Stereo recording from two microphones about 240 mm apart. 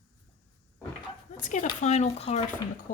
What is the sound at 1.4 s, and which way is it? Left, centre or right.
Speech, left.